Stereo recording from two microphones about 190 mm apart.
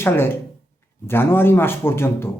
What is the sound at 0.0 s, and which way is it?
A man's voice, 10° left (ahead or behind).